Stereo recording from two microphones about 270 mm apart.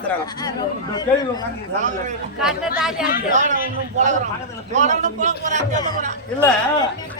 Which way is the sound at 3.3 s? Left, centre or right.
Right.